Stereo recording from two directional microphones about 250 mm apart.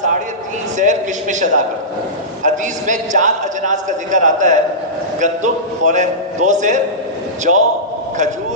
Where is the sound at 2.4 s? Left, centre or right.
Right.